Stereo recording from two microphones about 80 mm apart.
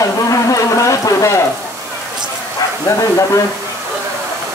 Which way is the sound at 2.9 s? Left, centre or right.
Left.